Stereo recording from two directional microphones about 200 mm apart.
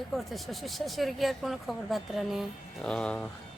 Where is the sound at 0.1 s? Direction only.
Centre (ahead or behind).